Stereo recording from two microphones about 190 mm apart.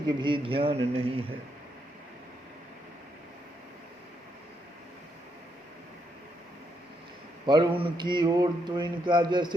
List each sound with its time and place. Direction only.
0.2 s speech: 25° right (ahead or behind)
7.4 s speech: 25° right (ahead or behind)